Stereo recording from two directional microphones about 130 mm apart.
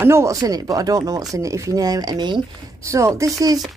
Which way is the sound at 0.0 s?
20° right (ahead or behind).